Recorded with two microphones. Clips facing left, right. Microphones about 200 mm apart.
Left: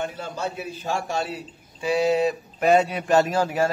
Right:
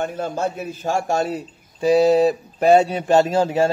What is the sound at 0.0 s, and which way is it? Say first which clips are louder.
A man's voice: right 6 dB; 50° right (ahead or behind).